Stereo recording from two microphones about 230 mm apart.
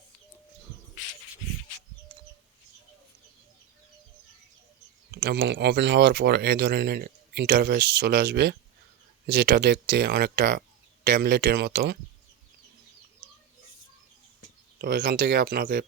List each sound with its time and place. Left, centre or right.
5.1 s speech: right
14.8 s speech: right